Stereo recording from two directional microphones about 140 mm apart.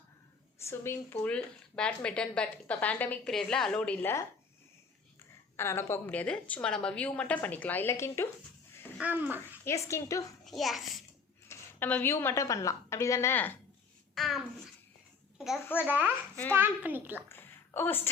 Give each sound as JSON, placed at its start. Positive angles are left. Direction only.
{"t": 0.6, "sound": "speech", "side_deg": 20}
{"t": 5.5, "sound": "speech", "side_deg": 15}
{"t": 9.0, "sound": "a child's voice", "side_deg": -15}
{"t": 9.6, "sound": "a woman's voice", "side_deg": 20}
{"t": 10.4, "sound": "a child's voice", "side_deg": 0}
{"t": 11.4, "sound": "a woman's voice", "side_deg": 15}
{"t": 14.2, "sound": "a child's voice", "side_deg": 0}
{"t": 15.8, "sound": "a child's voice", "side_deg": -10}
{"t": 17.2, "sound": "speech", "side_deg": 15}